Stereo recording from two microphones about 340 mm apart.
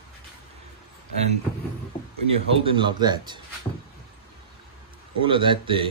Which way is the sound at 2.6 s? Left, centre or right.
Centre.